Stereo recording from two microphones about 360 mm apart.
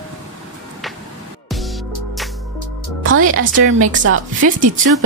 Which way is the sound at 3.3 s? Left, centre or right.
Right.